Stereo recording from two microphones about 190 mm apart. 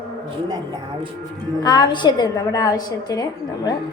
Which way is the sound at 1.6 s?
25° left (ahead or behind).